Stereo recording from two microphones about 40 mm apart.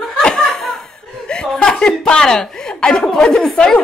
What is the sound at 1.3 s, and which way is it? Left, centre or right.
A woman's voice, centre.